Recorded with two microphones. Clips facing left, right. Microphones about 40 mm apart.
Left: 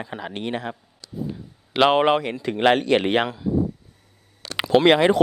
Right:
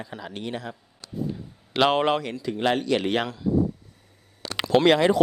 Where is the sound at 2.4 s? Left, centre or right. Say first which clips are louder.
Left 5 dB; left.